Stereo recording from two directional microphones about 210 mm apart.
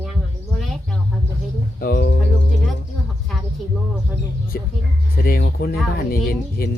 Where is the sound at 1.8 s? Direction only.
45° left (ahead or behind).